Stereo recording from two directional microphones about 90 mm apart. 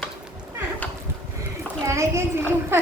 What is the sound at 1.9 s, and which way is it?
Speech, 30° right (ahead or behind).